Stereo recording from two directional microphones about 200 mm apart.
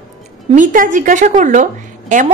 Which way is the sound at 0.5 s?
40° right (ahead or behind).